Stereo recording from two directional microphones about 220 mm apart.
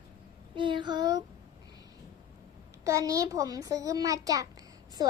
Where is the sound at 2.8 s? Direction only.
15° right (ahead or behind).